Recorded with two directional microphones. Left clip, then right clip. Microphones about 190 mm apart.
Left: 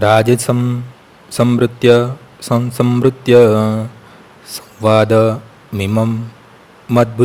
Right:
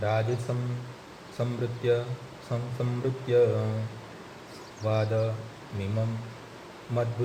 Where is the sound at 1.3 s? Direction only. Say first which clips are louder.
Left 19 dB; 55° left (ahead or behind).